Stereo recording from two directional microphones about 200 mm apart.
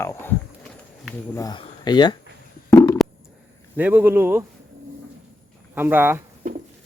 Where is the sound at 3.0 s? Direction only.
Centre (ahead or behind).